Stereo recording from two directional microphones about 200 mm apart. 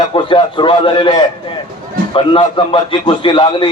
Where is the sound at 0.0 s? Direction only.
25° left (ahead or behind).